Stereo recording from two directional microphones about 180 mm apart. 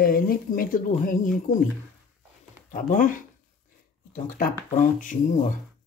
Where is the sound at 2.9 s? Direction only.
45° left (ahead or behind).